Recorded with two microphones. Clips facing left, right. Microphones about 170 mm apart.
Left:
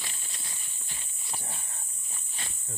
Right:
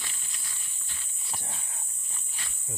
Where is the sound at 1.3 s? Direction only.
Centre (ahead or behind).